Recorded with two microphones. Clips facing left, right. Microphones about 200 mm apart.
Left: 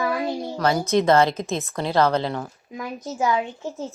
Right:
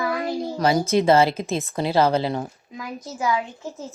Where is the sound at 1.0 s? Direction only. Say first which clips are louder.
Right 1 dB; 5° right (ahead or behind).